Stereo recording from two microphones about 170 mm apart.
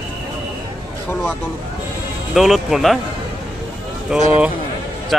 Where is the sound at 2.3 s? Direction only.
Centre (ahead or behind).